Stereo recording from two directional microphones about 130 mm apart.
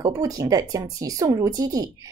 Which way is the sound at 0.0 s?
25° right (ahead or behind).